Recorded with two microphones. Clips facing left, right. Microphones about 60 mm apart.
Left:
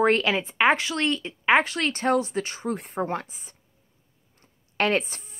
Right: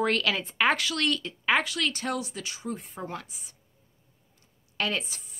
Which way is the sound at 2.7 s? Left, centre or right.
Left.